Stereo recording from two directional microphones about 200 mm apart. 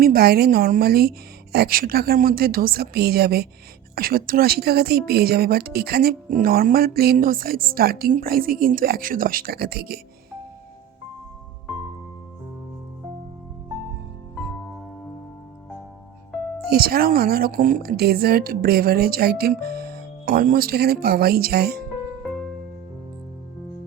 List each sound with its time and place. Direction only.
0.0 s speech: 50° right (ahead or behind)
16.6 s speech: 50° right (ahead or behind)